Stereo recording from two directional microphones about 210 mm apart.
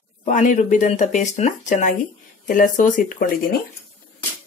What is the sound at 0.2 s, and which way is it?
Speech, 35° left (ahead or behind).